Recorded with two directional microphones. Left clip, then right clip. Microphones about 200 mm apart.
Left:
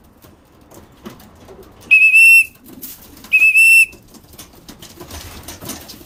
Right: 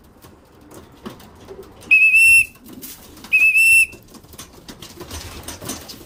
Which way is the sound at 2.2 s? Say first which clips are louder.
Left 4 dB; 45° right (ahead or behind).